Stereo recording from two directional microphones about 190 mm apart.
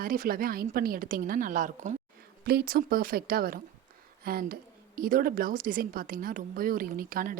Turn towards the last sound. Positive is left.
turn(degrees=-45)  # may be behind; listen again after turning